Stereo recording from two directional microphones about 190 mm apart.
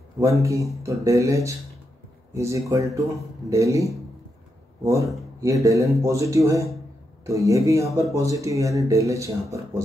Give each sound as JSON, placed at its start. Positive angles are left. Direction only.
{"t": 0.2, "sound": "speech", "side_deg": -15}